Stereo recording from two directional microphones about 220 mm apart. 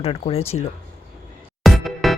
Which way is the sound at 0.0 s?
25° left (ahead or behind).